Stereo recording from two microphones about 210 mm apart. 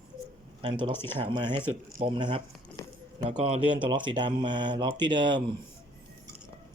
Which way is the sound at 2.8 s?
20° left (ahead or behind).